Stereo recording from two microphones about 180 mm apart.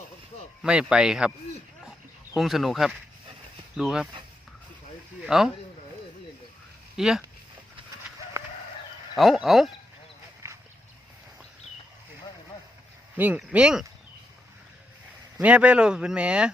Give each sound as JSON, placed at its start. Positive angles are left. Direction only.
{"t": 0.6, "sound": "speech", "side_deg": -5}
{"t": 1.8, "sound": "a sound", "side_deg": -5}
{"t": 3.8, "sound": "speech", "side_deg": 0}
{"t": 5.2, "sound": "speech", "side_deg": 0}
{"t": 6.9, "sound": "speech", "side_deg": 0}
{"t": 8.4, "sound": "chicken", "side_deg": -15}
{"t": 9.1, "sound": "speech", "side_deg": 0}
{"t": 10.4, "sound": "a sound", "side_deg": -15}
{"t": 13.1, "sound": "speech", "side_deg": -10}
{"t": 15.4, "sound": "speech", "side_deg": -10}